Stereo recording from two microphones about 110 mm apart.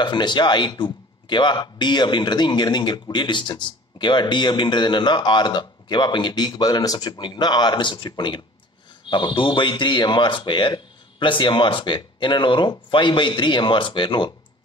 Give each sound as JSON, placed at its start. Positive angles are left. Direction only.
{"t": 0.0, "sound": "speech", "side_deg": 45}